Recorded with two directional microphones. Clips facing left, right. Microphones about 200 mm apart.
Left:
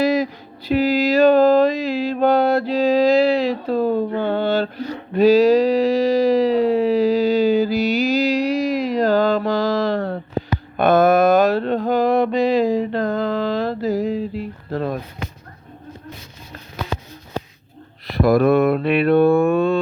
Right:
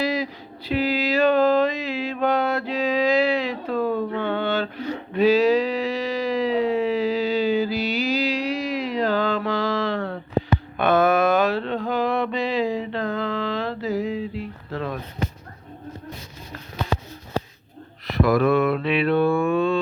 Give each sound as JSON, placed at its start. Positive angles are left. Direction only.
{"t": 0.0, "sound": "a sound", "side_deg": 45}
{"t": 10.8, "sound": "mantra", "side_deg": 40}
{"t": 18.0, "sound": "mantra", "side_deg": 35}